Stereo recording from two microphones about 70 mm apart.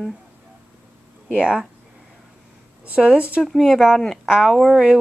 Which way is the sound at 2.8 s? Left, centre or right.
Centre.